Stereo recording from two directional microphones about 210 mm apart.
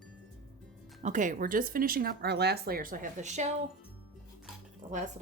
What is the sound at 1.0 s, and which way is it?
Speech, 35° right (ahead or behind).